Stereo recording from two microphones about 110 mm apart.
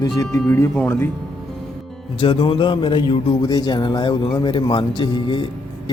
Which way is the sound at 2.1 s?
45° left (ahead or behind).